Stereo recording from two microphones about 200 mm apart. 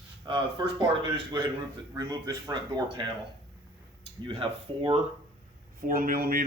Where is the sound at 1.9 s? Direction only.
20° right (ahead or behind).